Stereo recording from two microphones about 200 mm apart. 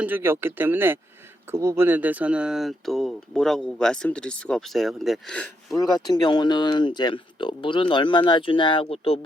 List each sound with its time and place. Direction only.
0.0 s speech: 10° right (ahead or behind)
5.7 s speech: 20° left (ahead or behind)